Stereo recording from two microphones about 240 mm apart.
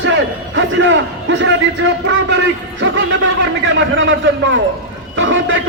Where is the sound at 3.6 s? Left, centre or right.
Right.